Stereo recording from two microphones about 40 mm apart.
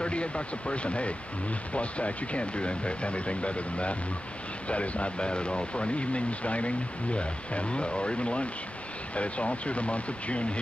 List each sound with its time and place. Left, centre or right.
0.0 s speech: left